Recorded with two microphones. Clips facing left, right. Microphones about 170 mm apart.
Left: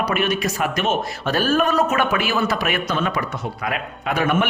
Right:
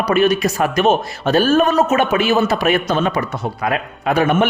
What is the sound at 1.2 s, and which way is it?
A man's voice, 25° right (ahead or behind).